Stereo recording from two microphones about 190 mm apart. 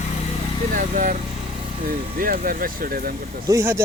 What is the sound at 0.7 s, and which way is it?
Speech, 45° right (ahead or behind).